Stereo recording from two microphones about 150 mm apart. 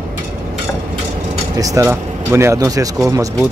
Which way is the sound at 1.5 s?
20° right (ahead or behind).